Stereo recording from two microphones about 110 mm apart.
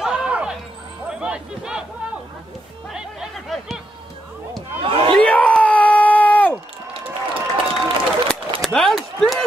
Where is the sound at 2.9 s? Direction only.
5° right (ahead or behind).